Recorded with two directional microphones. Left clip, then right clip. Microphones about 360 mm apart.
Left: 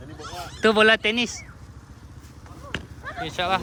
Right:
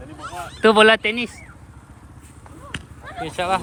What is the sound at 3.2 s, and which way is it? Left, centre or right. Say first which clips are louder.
Speech: right 2 dB; centre.